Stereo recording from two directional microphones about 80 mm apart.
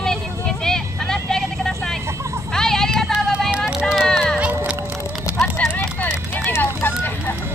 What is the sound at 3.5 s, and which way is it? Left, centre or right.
Run, centre.